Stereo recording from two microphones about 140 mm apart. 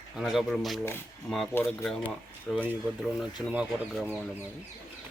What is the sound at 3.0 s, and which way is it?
Speech, 10° right (ahead or behind).